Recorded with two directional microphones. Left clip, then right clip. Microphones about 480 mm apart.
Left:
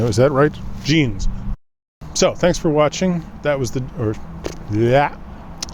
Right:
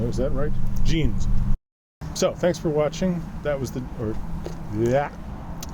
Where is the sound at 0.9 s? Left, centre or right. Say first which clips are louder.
Left 10 dB; left.